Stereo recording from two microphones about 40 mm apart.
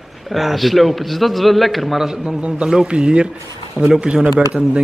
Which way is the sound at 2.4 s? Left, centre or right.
Right.